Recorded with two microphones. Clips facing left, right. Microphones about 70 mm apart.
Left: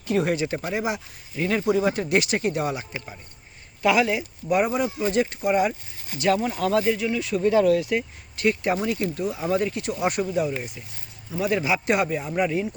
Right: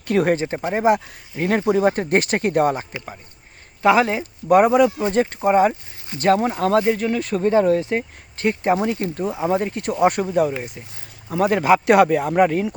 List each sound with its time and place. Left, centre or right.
0.0 s speech: right
0.3 s speech: right
3.8 s speech: right
4.4 s speech: right